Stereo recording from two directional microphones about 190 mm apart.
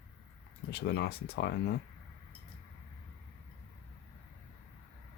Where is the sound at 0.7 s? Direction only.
60° left (ahead or behind).